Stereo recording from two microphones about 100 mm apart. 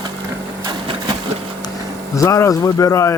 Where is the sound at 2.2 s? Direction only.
30° left (ahead or behind).